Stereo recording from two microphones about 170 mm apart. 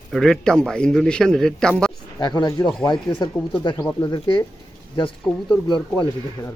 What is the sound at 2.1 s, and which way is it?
Speech, 25° left (ahead or behind).